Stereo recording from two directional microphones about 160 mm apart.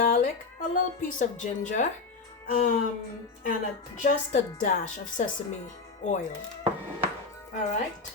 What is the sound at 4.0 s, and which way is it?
Speech, 55° left (ahead or behind).